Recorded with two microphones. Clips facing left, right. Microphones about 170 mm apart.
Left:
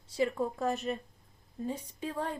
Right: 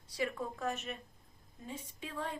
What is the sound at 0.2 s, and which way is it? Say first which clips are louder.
Speech: left 7 dB; 30° left (ahead or behind).